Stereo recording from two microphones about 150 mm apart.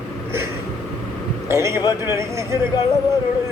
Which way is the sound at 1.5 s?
20° right (ahead or behind).